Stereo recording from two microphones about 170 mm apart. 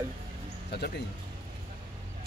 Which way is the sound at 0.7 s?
75° left (ahead or behind).